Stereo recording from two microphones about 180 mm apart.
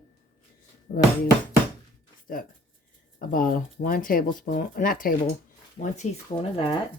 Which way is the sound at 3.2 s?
50° left (ahead or behind).